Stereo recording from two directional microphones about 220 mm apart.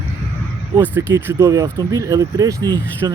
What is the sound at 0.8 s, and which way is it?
Speech, 10° right (ahead or behind).